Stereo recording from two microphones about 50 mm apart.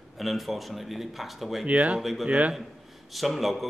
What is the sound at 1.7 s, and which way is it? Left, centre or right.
Speech, right.